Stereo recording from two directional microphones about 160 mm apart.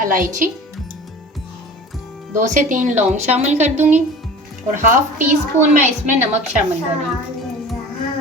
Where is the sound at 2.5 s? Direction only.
50° right (ahead or behind).